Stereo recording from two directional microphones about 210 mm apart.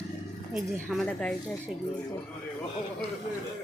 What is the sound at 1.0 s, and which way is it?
Speech, 5° left (ahead or behind).